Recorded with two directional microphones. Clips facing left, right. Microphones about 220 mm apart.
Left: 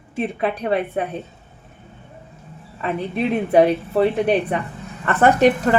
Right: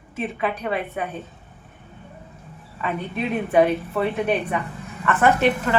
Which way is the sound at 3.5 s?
35° left (ahead or behind).